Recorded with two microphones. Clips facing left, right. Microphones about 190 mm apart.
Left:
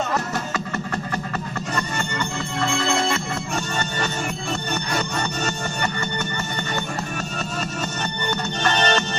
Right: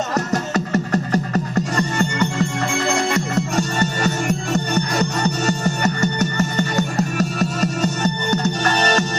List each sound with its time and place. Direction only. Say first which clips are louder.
0.1 s music: right 5 dB; 40° right (ahead or behind)